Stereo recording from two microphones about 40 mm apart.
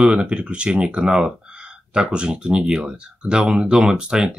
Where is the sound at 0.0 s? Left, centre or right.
Right.